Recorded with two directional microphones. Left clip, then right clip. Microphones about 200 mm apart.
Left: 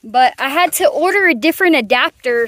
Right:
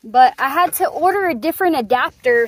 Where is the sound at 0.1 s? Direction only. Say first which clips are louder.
Even; 30° left (ahead or behind).